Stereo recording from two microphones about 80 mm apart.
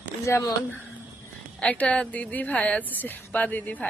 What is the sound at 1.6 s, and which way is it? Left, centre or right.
A woman's voice, centre.